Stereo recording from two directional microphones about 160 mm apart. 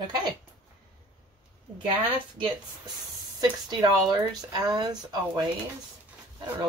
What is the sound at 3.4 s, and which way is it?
Speech, 25° right (ahead or behind).